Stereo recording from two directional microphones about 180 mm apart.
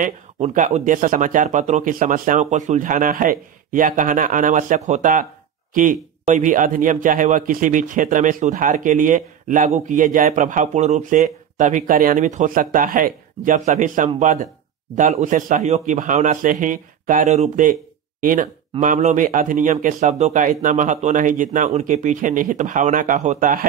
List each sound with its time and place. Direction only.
0.0 s a man's voice: 45° right (ahead or behind)